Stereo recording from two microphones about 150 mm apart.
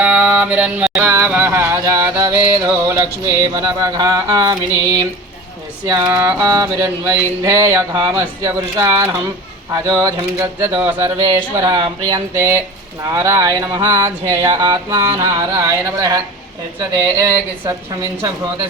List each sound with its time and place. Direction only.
0.0 s a sound: 10° right (ahead or behind)
3.8 s music: 25° right (ahead or behind)
10.8 s speech: 15° right (ahead or behind)
11.3 s music: 30° right (ahead or behind)
12.3 s speech: 15° right (ahead or behind)
13.1 s music: 20° right (ahead or behind)